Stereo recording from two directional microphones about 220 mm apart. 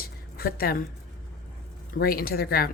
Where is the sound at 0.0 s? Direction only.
45° left (ahead or behind).